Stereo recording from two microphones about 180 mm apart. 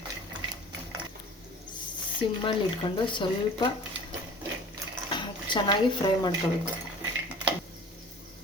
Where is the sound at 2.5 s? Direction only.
25° left (ahead or behind).